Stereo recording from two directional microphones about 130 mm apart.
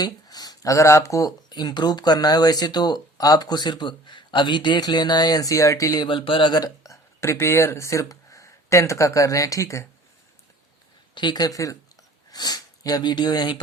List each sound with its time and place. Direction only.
0.0 s speech: 30° left (ahead or behind)
11.1 s speech: 35° left (ahead or behind)